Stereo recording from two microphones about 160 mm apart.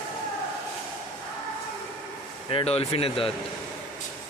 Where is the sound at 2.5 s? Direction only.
35° left (ahead or behind).